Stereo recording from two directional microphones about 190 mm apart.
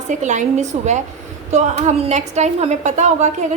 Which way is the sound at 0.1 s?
40° right (ahead or behind).